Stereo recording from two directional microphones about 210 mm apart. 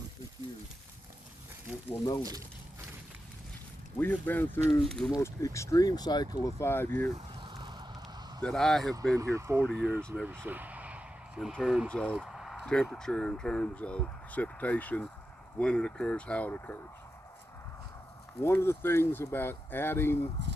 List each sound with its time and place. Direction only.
4.0 s speech: 10° left (ahead or behind)
5.1 s speech: 15° left (ahead or behind)
7.3 s a sound: 20° right (ahead or behind)
8.4 s speech: centre (ahead or behind)
9.1 s speech: 15° right (ahead or behind); by 16.8 s 10° left (ahead or behind)
18.3 s speech: 10° left (ahead or behind)
20.4 s a sound: 55° right (ahead or behind)